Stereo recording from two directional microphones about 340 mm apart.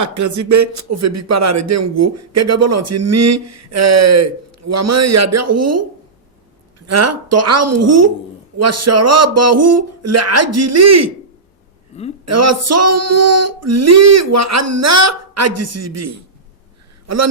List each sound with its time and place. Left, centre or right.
0.0 s speech: right
12.2 s speech: right